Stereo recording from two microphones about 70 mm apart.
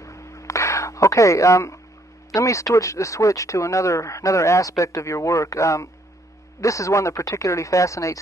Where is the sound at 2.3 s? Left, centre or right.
Left.